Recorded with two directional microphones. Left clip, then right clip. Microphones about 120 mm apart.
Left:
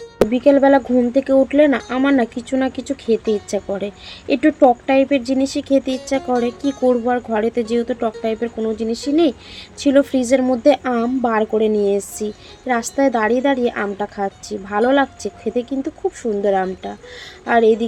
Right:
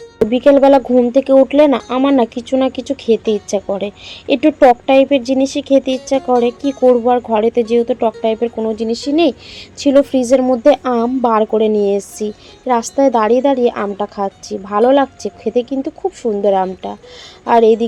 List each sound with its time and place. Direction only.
0.3 s speech: 30° right (ahead or behind)
6.7 s speech: centre (ahead or behind)
7.3 s speech: 25° right (ahead or behind)
8.5 s speech: 20° right (ahead or behind)